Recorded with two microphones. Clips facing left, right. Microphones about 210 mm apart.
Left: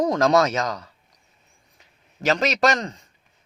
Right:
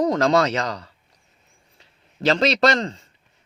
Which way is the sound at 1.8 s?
35° right (ahead or behind).